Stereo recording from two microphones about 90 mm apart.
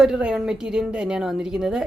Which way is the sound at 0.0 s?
10° right (ahead or behind).